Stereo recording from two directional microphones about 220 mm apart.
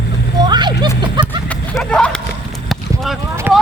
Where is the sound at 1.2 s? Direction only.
20° right (ahead or behind).